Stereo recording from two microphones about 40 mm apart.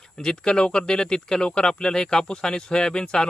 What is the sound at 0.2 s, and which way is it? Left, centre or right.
Speech, centre.